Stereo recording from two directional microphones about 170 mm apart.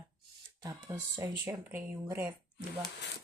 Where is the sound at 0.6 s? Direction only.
20° right (ahead or behind).